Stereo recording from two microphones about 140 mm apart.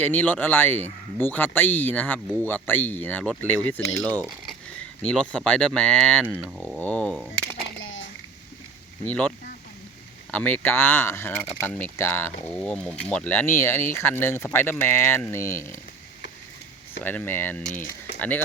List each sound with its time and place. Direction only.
0.0 s speech: 10° left (ahead or behind)
4.8 s a sound: 10° left (ahead or behind)
5.5 s speech: 10° left (ahead or behind)
9.0 s speech: 10° left (ahead or behind)
10.3 s speech: 10° left (ahead or behind)
17.0 s speech: 10° left (ahead or behind)